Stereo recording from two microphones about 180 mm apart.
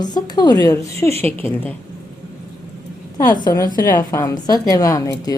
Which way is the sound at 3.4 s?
20° left (ahead or behind).